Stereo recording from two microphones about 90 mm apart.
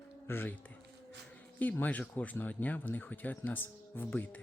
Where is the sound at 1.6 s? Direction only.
20° left (ahead or behind).